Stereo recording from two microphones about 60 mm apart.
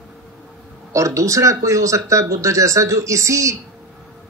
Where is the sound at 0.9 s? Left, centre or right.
Right.